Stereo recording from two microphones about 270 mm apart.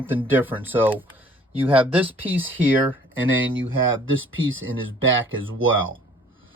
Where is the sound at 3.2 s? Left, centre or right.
Right.